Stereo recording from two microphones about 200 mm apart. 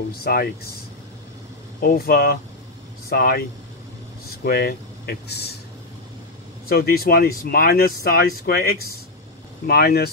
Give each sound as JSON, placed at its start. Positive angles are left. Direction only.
{"t": 0.1, "sound": "speech", "side_deg": 50}
{"t": 1.8, "sound": "speech", "side_deg": 45}
{"t": 4.5, "sound": "speech", "side_deg": 50}
{"t": 6.7, "sound": "speech", "side_deg": 50}